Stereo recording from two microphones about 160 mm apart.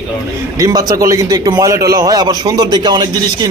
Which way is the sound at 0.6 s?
20° right (ahead or behind).